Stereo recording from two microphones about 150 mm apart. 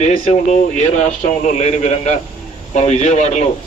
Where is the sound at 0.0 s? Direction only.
55° left (ahead or behind).